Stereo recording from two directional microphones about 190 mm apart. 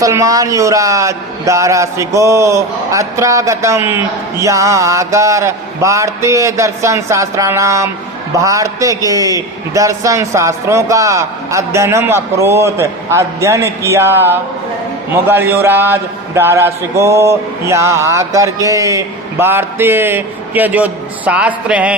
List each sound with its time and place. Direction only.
0.0 s a man's voice: 15° right (ahead or behind)